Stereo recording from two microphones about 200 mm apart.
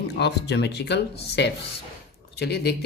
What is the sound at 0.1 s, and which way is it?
Speech, 60° left (ahead or behind).